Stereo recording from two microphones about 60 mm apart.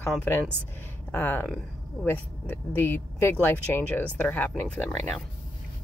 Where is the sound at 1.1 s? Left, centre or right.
Left.